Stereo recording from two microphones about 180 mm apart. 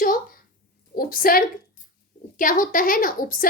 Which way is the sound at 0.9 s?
55° left (ahead or behind).